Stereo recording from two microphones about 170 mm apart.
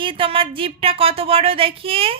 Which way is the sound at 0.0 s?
30° right (ahead or behind).